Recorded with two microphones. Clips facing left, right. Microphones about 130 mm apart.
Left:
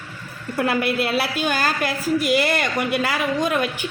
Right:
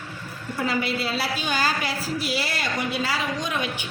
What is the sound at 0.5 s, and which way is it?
A woman's voice, 60° left (ahead or behind).